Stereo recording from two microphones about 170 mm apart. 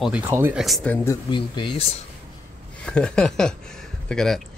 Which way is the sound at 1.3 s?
30° left (ahead or behind).